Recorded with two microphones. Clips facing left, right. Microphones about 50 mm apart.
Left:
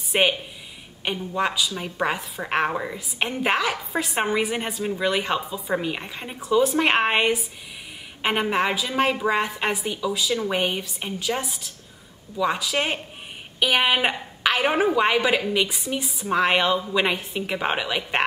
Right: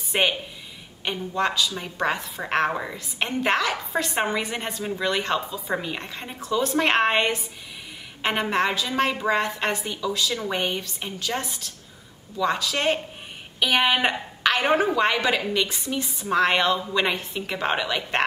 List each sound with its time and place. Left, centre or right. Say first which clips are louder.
0.1 s a woman's voice: left 2 dB; centre